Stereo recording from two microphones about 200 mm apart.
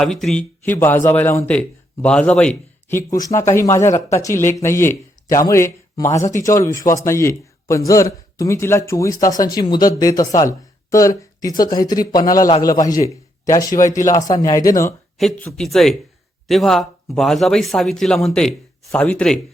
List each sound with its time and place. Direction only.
0.0 s speech: centre (ahead or behind)
3.2 s speech: 15° left (ahead or behind)
15.2 s speech: centre (ahead or behind)